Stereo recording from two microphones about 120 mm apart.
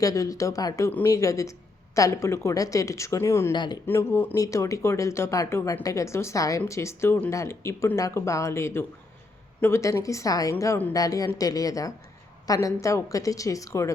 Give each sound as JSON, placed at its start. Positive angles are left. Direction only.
{"t": 0.0, "sound": "speech", "side_deg": 30}
{"t": 3.5, "sound": "speech", "side_deg": 40}
{"t": 3.8, "sound": "speech", "side_deg": 20}